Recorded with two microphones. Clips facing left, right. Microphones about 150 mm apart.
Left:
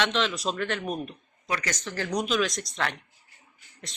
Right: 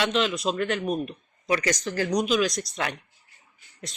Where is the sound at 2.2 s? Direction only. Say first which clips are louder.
Right 3 dB; 10° right (ahead or behind).